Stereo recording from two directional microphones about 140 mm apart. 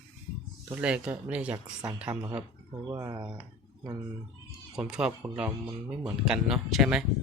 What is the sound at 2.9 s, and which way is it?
Speech, 25° right (ahead or behind).